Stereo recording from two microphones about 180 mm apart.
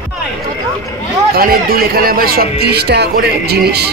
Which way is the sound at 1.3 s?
55° right (ahead or behind).